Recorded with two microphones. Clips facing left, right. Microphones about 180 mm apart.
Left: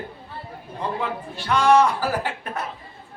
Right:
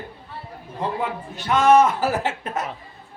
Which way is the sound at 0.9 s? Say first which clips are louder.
Right 1 dB; 20° right (ahead or behind).